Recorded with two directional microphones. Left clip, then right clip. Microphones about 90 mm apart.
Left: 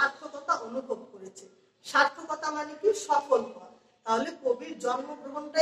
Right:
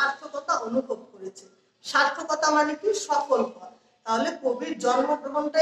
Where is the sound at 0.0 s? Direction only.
35° right (ahead or behind).